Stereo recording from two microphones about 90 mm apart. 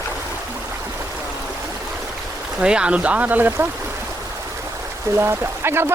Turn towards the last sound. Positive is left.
turn(degrees=-25)  # may be behind; listen again after turning